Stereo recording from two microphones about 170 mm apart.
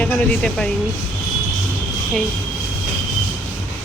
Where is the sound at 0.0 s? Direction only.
5° left (ahead or behind).